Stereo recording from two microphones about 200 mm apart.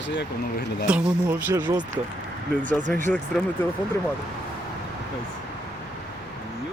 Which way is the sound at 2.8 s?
40° right (ahead or behind).